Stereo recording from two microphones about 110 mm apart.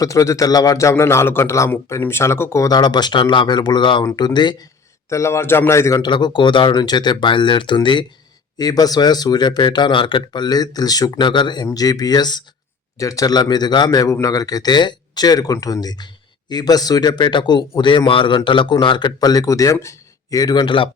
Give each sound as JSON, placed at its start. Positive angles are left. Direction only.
{"t": 0.0, "sound": "a man's voice", "side_deg": 30}
{"t": 5.0, "sound": "a man's voice", "side_deg": 25}
{"t": 6.0, "sound": "a man's voice", "side_deg": 40}
{"t": 8.5, "sound": "a man's voice", "side_deg": 35}